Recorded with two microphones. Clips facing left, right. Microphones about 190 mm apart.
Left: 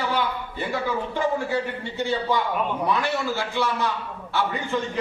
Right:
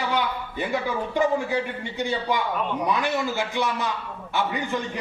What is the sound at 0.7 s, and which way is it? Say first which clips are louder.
A man's voice: left 1 dB; 15° right (ahead or behind).